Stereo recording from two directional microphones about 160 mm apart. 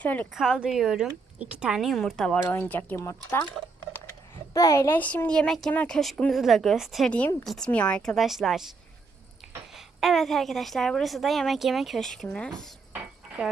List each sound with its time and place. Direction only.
0.0 s a woman's voice: 10° left (ahead or behind)
0.3 s speech: 5° right (ahead or behind); by 3.4 s 15° left (ahead or behind)
4.5 s a woman's voice: 20° left (ahead or behind); by 8.7 s centre (ahead or behind)
9.7 s speech: centre (ahead or behind)
12.9 s dishes: 10° right (ahead or behind)